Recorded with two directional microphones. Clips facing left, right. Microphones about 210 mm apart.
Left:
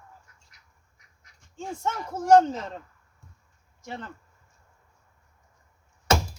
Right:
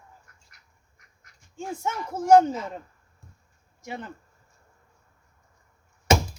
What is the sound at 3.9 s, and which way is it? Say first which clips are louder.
Speech: right 2 dB; 15° right (ahead or behind).